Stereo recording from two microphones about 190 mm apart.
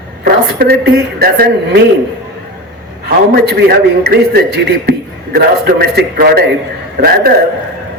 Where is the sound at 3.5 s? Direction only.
55° right (ahead or behind).